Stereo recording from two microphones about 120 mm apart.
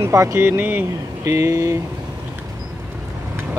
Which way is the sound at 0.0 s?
25° right (ahead or behind).